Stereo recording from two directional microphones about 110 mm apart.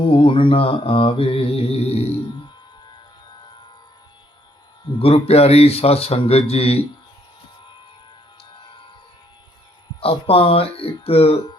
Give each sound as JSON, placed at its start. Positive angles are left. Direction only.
{"t": 0.0, "sound": "mantra", "side_deg": 55}
{"t": 4.9, "sound": "mantra", "side_deg": 60}
{"t": 10.0, "sound": "mantra", "side_deg": 60}